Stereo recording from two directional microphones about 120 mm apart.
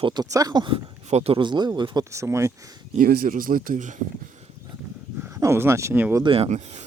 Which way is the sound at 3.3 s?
90° right.